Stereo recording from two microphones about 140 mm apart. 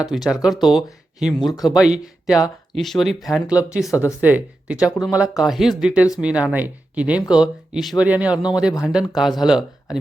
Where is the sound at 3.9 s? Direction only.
20° left (ahead or behind).